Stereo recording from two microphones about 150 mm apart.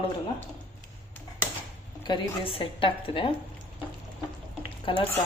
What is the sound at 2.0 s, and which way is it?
Speech, 35° left (ahead or behind).